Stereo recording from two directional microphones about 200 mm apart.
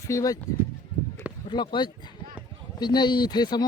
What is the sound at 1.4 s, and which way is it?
Speech, 25° left (ahead or behind).